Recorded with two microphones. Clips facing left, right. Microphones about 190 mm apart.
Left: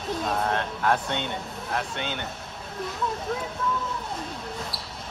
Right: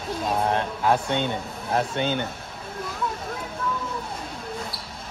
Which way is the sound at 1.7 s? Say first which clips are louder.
Right 7 dB; 40° right (ahead or behind).